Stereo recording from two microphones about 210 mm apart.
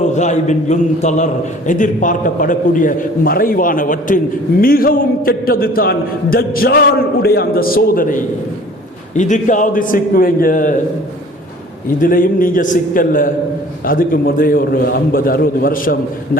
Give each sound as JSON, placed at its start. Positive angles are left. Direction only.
{"t": 0.0, "sound": "a man's voice", "side_deg": 35}
{"t": 9.1, "sound": "a man's voice", "side_deg": 35}
{"t": 11.9, "sound": "a man's voice", "side_deg": 40}